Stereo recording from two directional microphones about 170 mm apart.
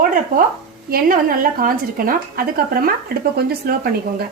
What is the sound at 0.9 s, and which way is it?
A woman's voice, 60° right (ahead or behind).